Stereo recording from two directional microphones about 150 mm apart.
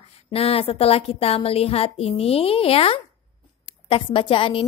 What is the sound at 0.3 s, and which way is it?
A woman's voice, 40° left (ahead or behind).